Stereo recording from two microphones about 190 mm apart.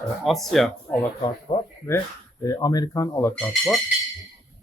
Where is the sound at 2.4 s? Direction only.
20° left (ahead or behind).